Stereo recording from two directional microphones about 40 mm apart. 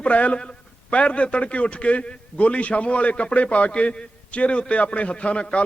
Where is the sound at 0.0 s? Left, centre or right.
Left.